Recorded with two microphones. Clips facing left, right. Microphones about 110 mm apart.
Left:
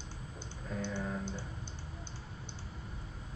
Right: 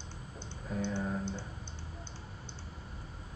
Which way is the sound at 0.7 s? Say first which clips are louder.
Right 3 dB; 15° right (ahead or behind).